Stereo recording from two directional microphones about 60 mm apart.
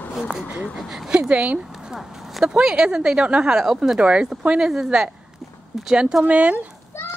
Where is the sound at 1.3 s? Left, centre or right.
Right.